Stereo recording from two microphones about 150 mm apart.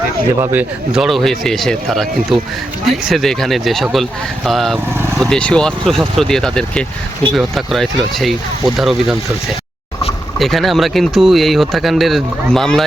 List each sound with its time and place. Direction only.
0.3 s speech: 20° right (ahead or behind)
0.9 s speech: centre (ahead or behind)
10.3 s speech: centre (ahead or behind)